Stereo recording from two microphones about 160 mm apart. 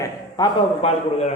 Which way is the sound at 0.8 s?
40° left (ahead or behind).